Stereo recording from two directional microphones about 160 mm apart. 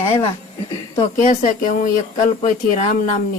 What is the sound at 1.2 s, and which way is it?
Speech, 50° left (ahead or behind).